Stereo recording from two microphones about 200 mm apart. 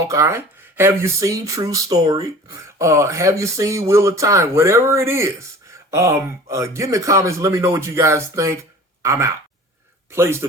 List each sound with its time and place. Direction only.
0.1 s a man's voice: 15° right (ahead or behind)